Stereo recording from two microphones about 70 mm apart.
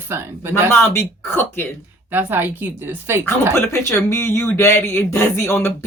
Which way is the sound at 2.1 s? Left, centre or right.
Right.